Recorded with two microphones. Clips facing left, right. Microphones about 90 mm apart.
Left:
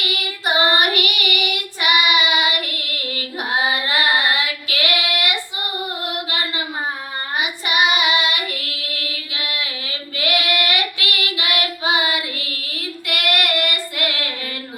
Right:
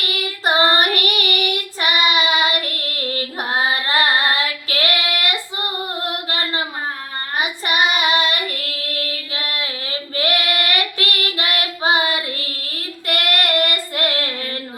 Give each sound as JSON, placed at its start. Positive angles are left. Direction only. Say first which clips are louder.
{"t": 0.0, "sound": "child singing", "louder": "right 2 dB", "side_deg": -40}
{"t": 6.0, "sound": "female singing", "louder": "right 1 dB", "side_deg": -35}
{"t": 7.3, "sound": "child singing", "louder": "right 1 dB", "side_deg": -40}